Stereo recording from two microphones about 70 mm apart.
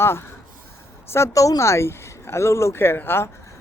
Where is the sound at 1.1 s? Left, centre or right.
Left.